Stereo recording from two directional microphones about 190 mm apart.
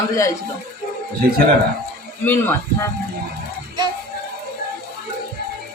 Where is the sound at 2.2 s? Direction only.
10° left (ahead or behind).